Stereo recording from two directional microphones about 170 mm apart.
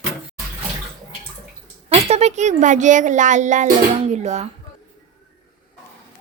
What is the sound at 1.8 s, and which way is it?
A child's voice, 35° right (ahead or behind).